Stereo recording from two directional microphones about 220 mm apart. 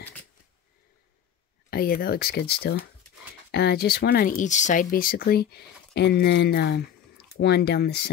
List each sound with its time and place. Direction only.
1.7 s speech: 45° left (ahead or behind)